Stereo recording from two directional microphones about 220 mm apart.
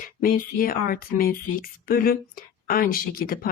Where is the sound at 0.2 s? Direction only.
40° left (ahead or behind).